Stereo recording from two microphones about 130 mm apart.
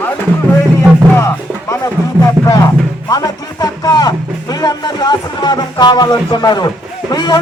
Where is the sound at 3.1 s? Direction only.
30° left (ahead or behind).